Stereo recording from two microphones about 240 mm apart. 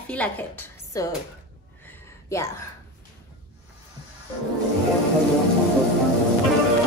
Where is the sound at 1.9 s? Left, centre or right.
Centre.